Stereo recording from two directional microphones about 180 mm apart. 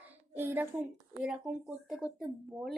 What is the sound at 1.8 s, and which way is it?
Speech, 5° right (ahead or behind).